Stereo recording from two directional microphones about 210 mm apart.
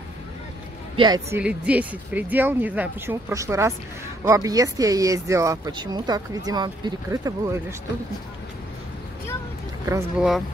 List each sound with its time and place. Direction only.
0.9 s speech: 20° right (ahead or behind)
1.4 s speech: 5° right (ahead or behind)
9.8 s speech: 15° right (ahead or behind)